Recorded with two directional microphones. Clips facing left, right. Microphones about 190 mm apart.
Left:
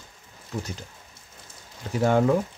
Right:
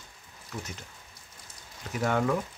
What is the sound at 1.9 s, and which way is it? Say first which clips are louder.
Speech: left 6 dB; 30° left (ahead or behind).